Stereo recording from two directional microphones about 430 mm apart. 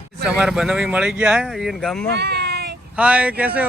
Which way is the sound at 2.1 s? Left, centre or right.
Right.